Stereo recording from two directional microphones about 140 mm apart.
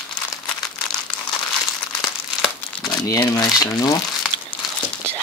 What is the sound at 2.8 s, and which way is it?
Speech, 30° left (ahead or behind).